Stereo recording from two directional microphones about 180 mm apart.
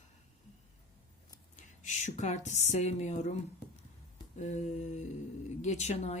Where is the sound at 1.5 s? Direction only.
40° left (ahead or behind).